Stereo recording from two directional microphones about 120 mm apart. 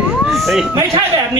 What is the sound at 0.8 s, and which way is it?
Speech, 30° right (ahead or behind).